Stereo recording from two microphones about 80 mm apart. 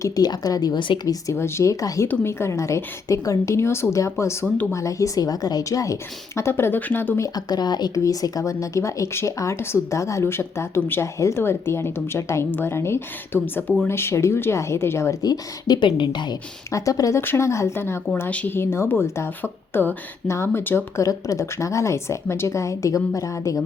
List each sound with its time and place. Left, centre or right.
0.2 s speech: left
1.0 s speech: left
7.3 s speech: left
8.0 s speech: left
15.2 s speech: left
16.7 s speech: left
17.2 s speech: left
18.3 s speech: left
19.4 s speech: left
20.2 s speech: left
21.0 s speech: left